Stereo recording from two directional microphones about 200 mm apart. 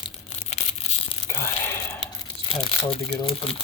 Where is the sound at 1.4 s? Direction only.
15° left (ahead or behind).